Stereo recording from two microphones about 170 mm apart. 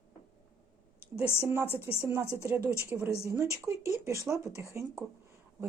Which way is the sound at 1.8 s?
15° right (ahead or behind).